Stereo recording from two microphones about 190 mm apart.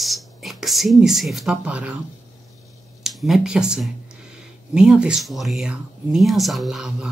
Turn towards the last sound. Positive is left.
turn(degrees=0)  # may be behind; listen again after turning